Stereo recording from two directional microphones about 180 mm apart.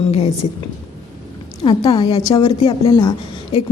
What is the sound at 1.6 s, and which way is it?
A woman's voice, 25° left (ahead or behind).